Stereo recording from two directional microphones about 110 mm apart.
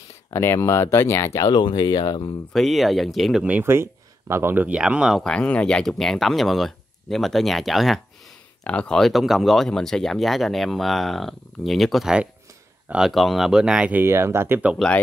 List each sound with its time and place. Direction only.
0.3 s speech: 25° left (ahead or behind); by 2.3 s 40° left (ahead or behind)
2.5 s speech: centre (ahead or behind)
3.4 s speech: 20° right (ahead or behind)
5.2 s speech: 10° left (ahead or behind); by 14.0 s 10° right (ahead or behind)
14.0 s speech: 25° right (ahead or behind)